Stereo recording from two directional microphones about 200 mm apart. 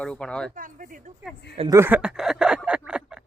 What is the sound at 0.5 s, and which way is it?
Speech, 40° right (ahead or behind).